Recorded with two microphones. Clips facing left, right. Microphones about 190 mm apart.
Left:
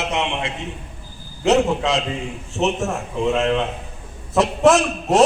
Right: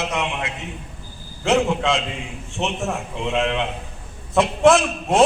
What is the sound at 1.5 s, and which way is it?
Speech, 40° left (ahead or behind).